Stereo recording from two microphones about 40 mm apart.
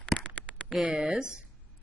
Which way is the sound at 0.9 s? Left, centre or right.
Centre.